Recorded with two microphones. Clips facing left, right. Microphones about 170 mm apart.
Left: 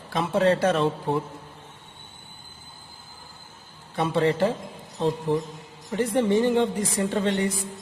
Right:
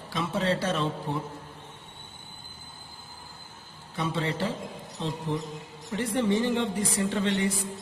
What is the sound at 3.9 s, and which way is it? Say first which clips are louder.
Speech: left 7 dB; 55° left (ahead or behind).